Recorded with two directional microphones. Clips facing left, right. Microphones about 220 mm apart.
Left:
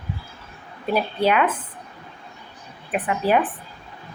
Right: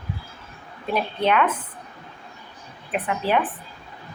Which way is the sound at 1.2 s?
10° left (ahead or behind).